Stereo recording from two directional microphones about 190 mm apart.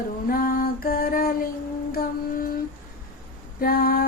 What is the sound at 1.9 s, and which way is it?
Music, 50° left (ahead or behind).